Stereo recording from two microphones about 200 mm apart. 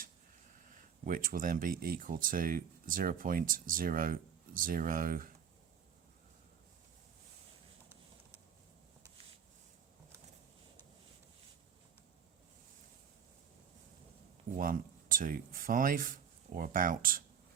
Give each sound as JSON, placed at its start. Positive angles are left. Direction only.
{"t": 1.0, "sound": "speech", "side_deg": -40}
{"t": 14.5, "sound": "speech", "side_deg": -45}